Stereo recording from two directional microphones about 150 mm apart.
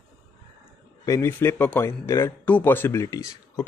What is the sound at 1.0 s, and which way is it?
Speech, 20° left (ahead or behind).